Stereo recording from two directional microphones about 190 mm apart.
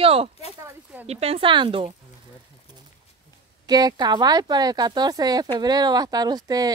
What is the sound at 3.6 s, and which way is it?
Speech, 20° right (ahead or behind).